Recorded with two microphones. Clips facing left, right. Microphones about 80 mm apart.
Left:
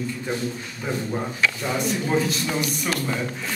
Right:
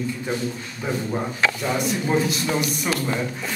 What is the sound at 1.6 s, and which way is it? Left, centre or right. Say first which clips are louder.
Speech: right 1 dB; centre.